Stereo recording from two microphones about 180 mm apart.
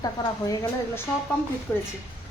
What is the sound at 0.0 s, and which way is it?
A woman's voice, 20° left (ahead or behind).